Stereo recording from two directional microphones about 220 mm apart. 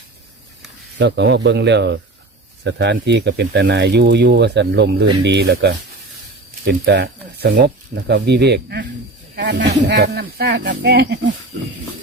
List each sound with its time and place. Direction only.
0.9 s speech: 50° right (ahead or behind)